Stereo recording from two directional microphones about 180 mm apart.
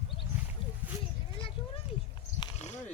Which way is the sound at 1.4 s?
30° left (ahead or behind).